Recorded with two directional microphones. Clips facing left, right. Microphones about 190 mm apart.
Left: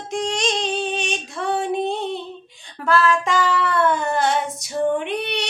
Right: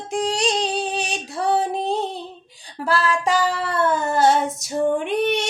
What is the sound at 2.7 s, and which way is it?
Child singing, 35° right (ahead or behind).